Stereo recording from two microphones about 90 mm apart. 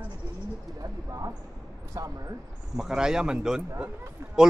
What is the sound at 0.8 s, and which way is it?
Speech, 40° right (ahead or behind).